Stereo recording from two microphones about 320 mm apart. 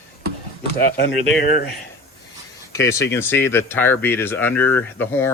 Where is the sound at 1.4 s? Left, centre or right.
Left.